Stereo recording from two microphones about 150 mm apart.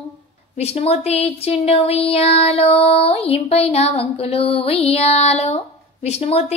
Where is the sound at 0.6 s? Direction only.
45° left (ahead or behind).